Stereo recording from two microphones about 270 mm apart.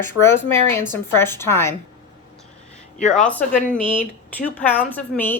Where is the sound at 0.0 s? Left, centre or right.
Centre.